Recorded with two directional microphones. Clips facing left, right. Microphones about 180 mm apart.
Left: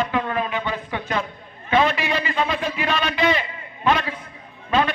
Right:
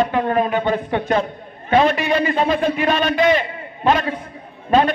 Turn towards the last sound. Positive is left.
turn(degrees=-40)  # may be behind; listen again after turning